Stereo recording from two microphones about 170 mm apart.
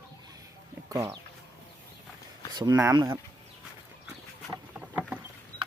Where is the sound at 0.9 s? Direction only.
20° right (ahead or behind).